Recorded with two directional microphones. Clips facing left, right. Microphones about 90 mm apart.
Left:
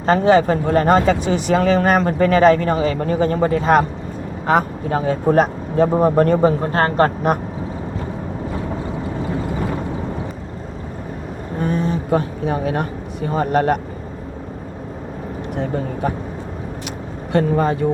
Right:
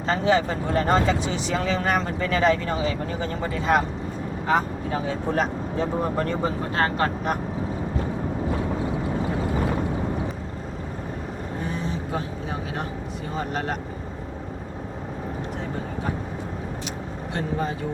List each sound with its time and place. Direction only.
0.0 s speech: 55° left (ahead or behind)
11.6 s vehicle: 55° left (ahead or behind)
13.3 s speech: 60° left (ahead or behind)
17.3 s speech: 60° left (ahead or behind)